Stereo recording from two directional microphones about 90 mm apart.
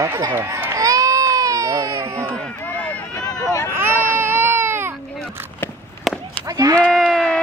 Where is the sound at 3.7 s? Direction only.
25° right (ahead or behind).